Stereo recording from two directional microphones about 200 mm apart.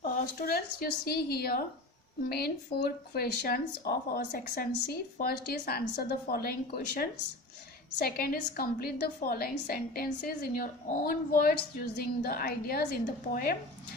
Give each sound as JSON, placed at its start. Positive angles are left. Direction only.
{"t": 0.0, "sound": "a woman's voice", "side_deg": 50}